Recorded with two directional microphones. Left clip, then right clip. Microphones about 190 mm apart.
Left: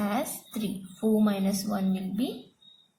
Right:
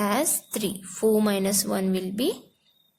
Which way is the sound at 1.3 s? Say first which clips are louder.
Right 5 dB; 50° right (ahead or behind).